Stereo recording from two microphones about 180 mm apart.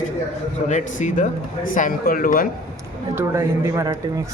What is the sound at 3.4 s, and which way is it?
Speech, 20° right (ahead or behind).